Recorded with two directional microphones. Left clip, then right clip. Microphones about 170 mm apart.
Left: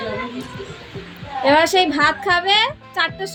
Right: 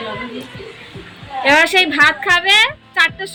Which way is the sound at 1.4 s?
20° left (ahead or behind).